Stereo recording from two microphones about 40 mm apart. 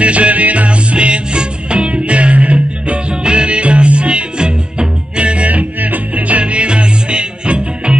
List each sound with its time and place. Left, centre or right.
0.0 s music: right
0.9 s music: right